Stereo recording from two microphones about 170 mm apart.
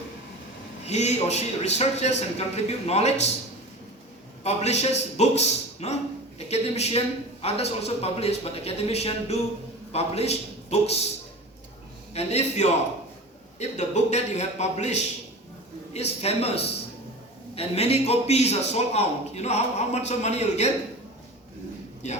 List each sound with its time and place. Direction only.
0.9 s a man's voice: 40° left (ahead or behind)
4.4 s a man's voice: 40° left (ahead or behind)
12.1 s a man's voice: 40° left (ahead or behind)